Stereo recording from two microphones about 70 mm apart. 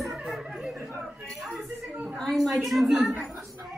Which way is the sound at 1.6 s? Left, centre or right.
Centre.